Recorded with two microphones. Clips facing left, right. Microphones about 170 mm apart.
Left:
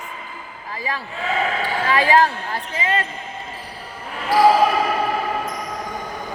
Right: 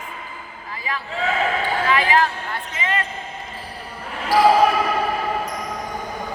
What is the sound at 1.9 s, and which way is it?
Basketball bounce, 40° left (ahead or behind).